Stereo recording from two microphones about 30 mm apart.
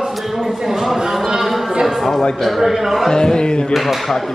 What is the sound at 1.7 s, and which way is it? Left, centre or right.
Speech, right.